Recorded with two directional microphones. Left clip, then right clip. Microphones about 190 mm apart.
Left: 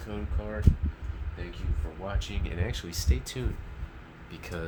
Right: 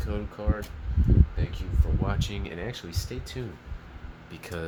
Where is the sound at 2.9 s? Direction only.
5° left (ahead or behind).